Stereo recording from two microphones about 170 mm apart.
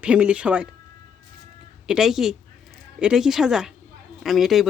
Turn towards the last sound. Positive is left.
turn(degrees=0)  # may be behind; listen again after turning